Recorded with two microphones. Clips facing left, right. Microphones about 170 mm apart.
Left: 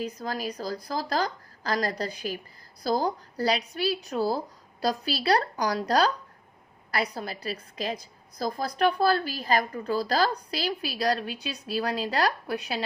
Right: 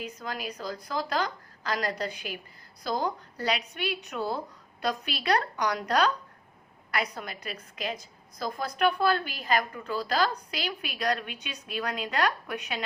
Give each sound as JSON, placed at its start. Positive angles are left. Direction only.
{"t": 0.0, "sound": "speech", "side_deg": 35}